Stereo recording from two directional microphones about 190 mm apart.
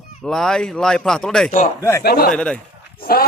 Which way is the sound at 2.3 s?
5° left (ahead or behind).